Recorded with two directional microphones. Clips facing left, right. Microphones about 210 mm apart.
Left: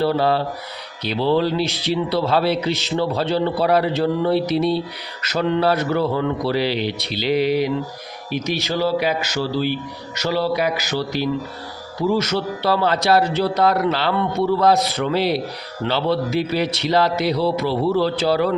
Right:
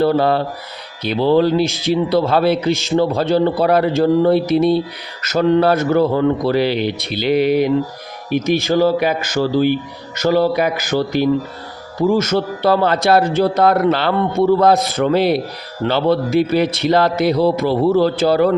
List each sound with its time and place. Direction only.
0.0 s speech: 50° right (ahead or behind)